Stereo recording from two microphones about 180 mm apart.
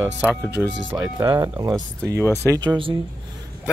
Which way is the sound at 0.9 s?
20° right (ahead or behind).